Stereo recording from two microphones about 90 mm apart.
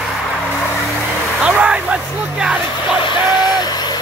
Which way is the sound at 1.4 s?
10° right (ahead or behind).